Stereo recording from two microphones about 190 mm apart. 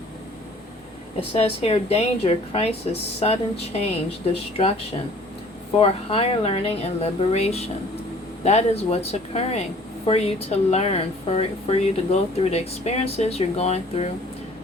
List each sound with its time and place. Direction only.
1.3 s speech: 30° left (ahead or behind)
5.8 s speech: 30° left (ahead or behind)